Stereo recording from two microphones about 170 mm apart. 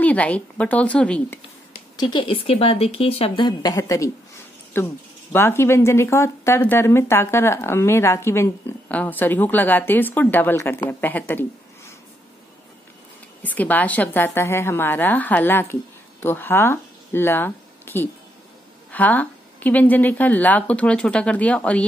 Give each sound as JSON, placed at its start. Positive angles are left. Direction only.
{"t": 0.0, "sound": "speech", "side_deg": 10}
{"t": 2.0, "sound": "a woman's voice", "side_deg": 25}
{"t": 13.4, "sound": "a woman's voice", "side_deg": 10}